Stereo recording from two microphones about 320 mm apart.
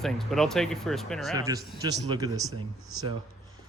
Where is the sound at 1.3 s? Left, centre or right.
Centre.